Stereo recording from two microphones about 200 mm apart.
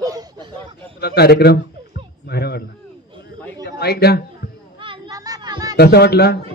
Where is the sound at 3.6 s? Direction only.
55° left (ahead or behind).